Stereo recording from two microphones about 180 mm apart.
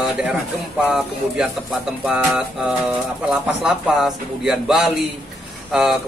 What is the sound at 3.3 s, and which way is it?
Speech, 5° right (ahead or behind).